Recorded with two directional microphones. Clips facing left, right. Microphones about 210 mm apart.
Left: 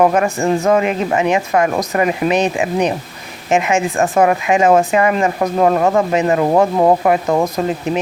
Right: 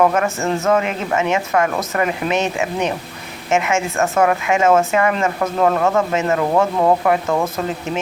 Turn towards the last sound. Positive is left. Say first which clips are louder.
# left 3 dB
turn(degrees=15)  # may be behind; listen again after turning